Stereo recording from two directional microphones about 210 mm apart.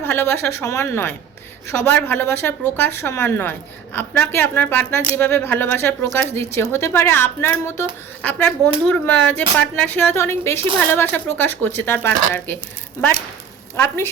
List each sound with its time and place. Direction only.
0.0 s speech: 10° left (ahead or behind)
13.7 s speech: 10° left (ahead or behind)